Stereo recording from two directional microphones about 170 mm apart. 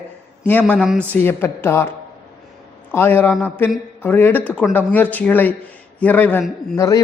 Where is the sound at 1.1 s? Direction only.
15° left (ahead or behind).